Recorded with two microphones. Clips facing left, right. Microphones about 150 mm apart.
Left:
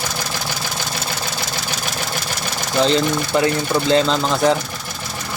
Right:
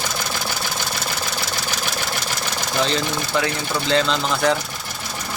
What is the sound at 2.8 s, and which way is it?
Speech, 30° left (ahead or behind).